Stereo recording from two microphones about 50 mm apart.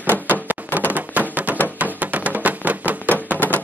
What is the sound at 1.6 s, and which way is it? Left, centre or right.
Music, right.